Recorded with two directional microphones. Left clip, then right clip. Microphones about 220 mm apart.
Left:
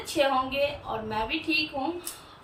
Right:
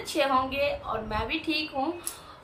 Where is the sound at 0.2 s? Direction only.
10° right (ahead or behind).